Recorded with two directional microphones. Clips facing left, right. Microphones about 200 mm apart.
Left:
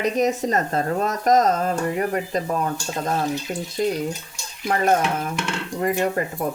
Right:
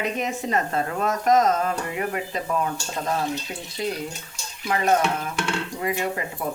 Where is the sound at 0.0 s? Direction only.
40° left (ahead or behind).